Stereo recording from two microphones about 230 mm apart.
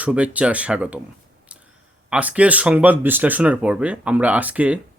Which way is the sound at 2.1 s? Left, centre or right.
Centre.